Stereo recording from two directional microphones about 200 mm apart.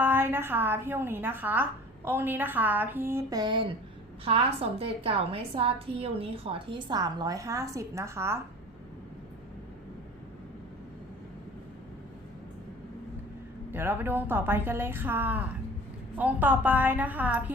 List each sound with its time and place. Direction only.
0.0 s a woman's voice: 10° right (ahead or behind)
13.7 s a woman's voice: 10° right (ahead or behind)